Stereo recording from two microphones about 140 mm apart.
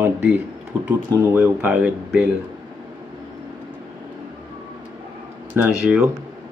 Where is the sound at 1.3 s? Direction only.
15° right (ahead or behind).